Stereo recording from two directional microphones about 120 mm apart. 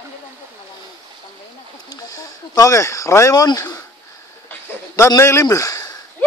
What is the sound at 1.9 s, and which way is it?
Speech, 30° left (ahead or behind).